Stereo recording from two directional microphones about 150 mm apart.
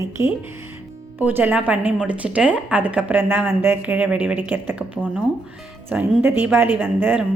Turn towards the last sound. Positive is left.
turn(degrees=-10)  # may be behind; listen again after turning